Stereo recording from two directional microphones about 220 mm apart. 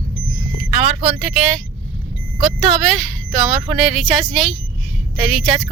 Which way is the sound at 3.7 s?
Centre (ahead or behind).